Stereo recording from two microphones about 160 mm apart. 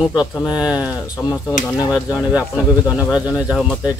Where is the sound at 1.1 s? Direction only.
Centre (ahead or behind).